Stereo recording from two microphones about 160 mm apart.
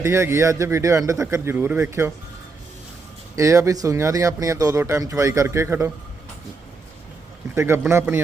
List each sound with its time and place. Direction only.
0.0 s speech: 15° right (ahead or behind)
3.3 s speech: 20° right (ahead or behind)
7.5 s speech: 15° right (ahead or behind)